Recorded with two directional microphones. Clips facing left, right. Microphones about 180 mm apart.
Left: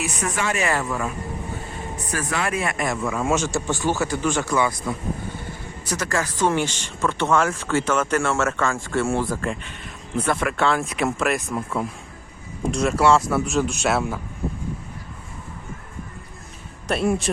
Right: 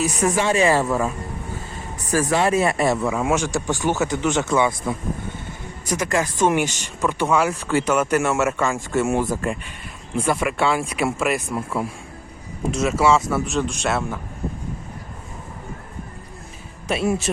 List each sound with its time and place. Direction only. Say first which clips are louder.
0.0 s speech: right 6 dB; 30° right (ahead or behind)
2.3 s speech: right 6 dB; 30° right (ahead or behind)
3.0 s speech: right 2 dB; 15° right (ahead or behind)
6.0 s speech: right 3 dB; 20° right (ahead or behind); by 14.2 s centre (ahead or behind)
16.9 s speech: even; 5° right (ahead or behind)